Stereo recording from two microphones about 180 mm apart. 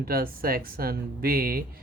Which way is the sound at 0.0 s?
55° right (ahead or behind).